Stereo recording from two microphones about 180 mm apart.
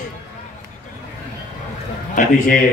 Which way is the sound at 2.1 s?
50° left (ahead or behind).